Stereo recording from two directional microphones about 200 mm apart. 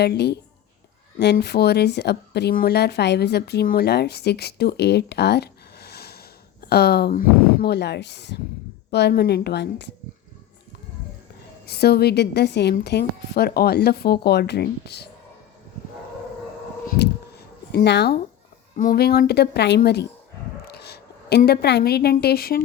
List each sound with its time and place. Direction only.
0.0 s a woman's voice: 55° left (ahead or behind)
11.6 s a woman's voice: 55° left (ahead or behind)
16.9 s a sound: 55° left (ahead or behind)
18.8 s a woman's voice: 45° left (ahead or behind)